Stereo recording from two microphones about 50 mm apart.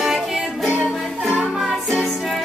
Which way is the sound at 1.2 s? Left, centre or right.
Right.